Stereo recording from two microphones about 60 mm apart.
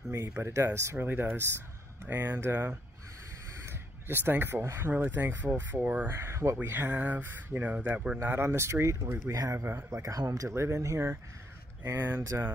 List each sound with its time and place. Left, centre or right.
0.1 s speech: right
6.1 s speech: right
6.7 s speech: right
8.2 s a man's voice: right
10.5 s speech: right
11.9 s speech: right
12.2 s speech: right